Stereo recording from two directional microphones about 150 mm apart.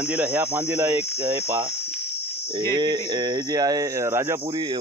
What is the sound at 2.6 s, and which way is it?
Speech, 30° right (ahead or behind).